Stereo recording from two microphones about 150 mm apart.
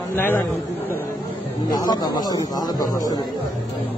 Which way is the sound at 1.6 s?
25° left (ahead or behind).